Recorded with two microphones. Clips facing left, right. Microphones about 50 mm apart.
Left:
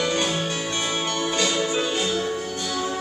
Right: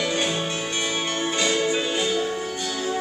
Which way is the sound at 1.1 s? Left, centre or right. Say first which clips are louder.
Right 1 dB; centre.